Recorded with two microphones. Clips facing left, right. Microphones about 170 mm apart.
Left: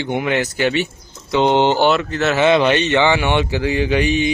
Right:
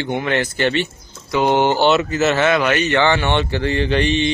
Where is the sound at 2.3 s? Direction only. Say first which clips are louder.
Left 6 dB; 20° left (ahead or behind).